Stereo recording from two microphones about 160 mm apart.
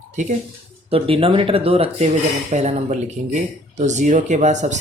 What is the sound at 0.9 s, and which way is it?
Speech, 35° right (ahead or behind).